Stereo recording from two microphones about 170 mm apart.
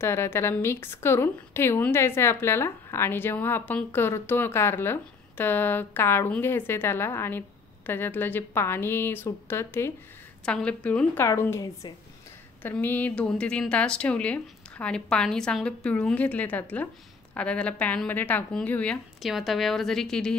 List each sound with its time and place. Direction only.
0.0 s speech: 15° left (ahead or behind)